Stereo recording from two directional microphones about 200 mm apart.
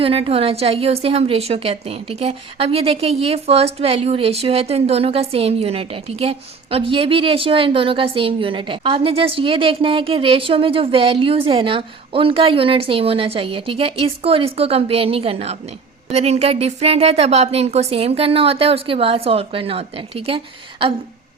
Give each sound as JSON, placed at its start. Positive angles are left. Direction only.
{"t": 0.0, "sound": "a woman's voice", "side_deg": -30}